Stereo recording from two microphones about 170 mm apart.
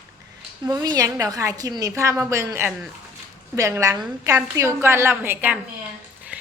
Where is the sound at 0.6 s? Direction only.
20° right (ahead or behind).